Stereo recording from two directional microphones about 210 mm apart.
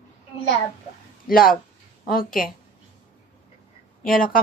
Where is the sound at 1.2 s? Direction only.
45° left (ahead or behind).